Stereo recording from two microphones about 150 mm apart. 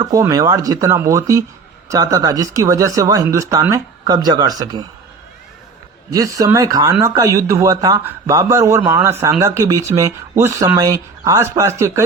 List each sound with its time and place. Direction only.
0.0 s speech: 25° right (ahead or behind)
6.1 s speech: 20° right (ahead or behind)